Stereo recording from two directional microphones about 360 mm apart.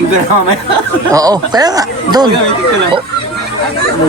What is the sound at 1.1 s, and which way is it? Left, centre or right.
Speech, centre.